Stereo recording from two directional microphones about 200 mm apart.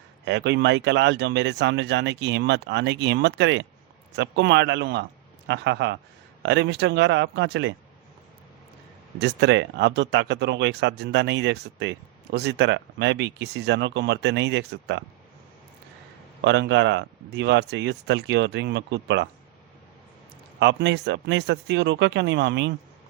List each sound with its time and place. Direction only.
0.3 s speech: 65° right (ahead or behind)
9.1 s speech: 60° right (ahead or behind)
16.4 s speech: 60° right (ahead or behind)
20.6 s speech: 60° right (ahead or behind)